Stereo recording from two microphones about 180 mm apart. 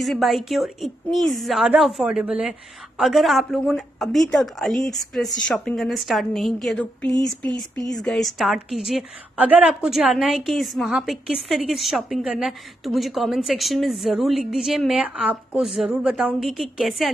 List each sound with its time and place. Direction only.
0.0 s a woman's voice: centre (ahead or behind)